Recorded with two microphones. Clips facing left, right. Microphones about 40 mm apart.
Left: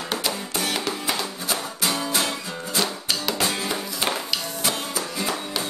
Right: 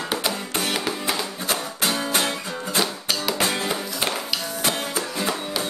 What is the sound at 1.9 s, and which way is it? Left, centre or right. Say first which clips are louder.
Music: right 1 dB; right.